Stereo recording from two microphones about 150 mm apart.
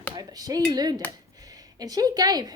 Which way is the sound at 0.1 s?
25° right (ahead or behind).